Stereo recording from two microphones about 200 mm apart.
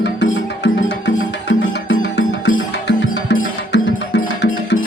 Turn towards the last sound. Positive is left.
turn(degrees=60)  # may be behind; listen again after turning